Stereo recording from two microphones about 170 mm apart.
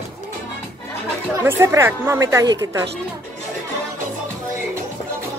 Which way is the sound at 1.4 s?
15° right (ahead or behind).